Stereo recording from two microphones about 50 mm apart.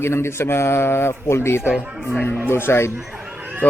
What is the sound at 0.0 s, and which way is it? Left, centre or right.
Speech, left.